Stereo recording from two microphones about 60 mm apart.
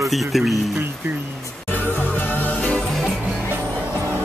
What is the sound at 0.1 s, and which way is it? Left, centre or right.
Speech, centre.